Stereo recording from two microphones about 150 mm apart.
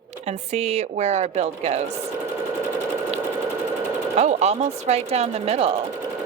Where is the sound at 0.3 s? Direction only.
45° right (ahead or behind).